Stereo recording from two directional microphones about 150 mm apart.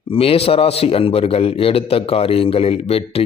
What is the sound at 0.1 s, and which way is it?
A man's voice, 40° left (ahead or behind).